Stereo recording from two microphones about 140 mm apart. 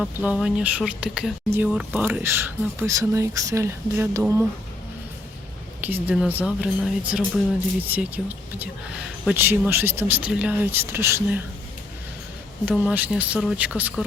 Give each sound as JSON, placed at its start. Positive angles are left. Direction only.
{"t": 0.0, "sound": "speech", "side_deg": -10}
{"t": 1.5, "sound": "speech", "side_deg": -15}
{"t": 5.8, "sound": "speech", "side_deg": -10}
{"t": 12.7, "sound": "speech", "side_deg": -10}